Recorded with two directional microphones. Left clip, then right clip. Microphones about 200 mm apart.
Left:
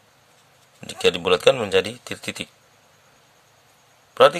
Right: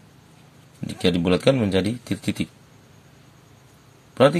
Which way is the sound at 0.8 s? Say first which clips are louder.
Left 3 dB; 30° left (ahead or behind).